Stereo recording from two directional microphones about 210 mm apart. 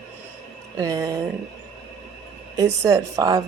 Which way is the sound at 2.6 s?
15° right (ahead or behind).